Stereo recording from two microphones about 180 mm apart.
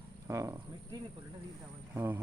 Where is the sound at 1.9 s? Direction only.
15° right (ahead or behind).